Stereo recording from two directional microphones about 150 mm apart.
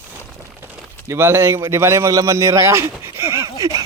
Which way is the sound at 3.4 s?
20° right (ahead or behind).